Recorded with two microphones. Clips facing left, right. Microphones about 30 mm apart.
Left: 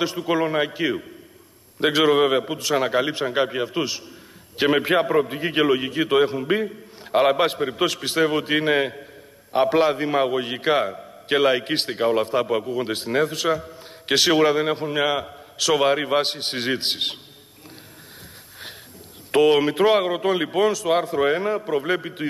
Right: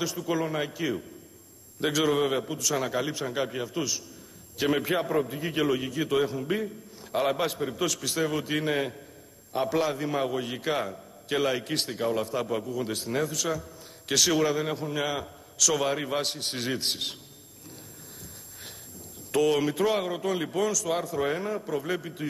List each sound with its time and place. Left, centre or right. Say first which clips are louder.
0.0 s a man's voice: left 7 dB; left
19.3 s a man's voice: left 7 dB; left